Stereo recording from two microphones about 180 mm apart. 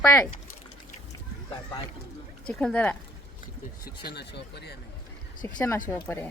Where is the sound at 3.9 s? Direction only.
65° left (ahead or behind).